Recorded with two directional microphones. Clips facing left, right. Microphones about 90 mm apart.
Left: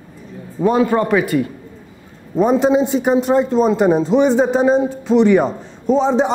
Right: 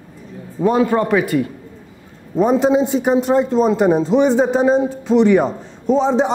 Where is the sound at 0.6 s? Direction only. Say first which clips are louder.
Even; 25° left (ahead or behind).